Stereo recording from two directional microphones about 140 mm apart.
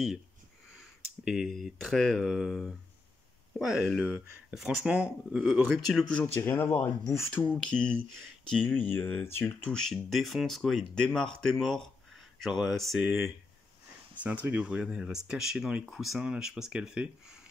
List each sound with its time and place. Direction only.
0.7 s a sound: 5° right (ahead or behind)
1.6 s speech: centre (ahead or behind)
6.2 s speech: 15° left (ahead or behind)
9.8 s speech: centre (ahead or behind)